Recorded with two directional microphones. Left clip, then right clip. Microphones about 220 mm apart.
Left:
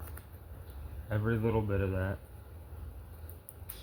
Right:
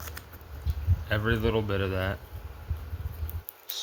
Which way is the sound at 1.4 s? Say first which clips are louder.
Right 5 dB; 15° right (ahead or behind).